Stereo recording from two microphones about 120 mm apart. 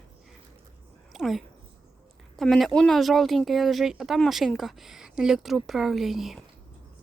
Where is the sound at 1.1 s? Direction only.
Centre (ahead or behind).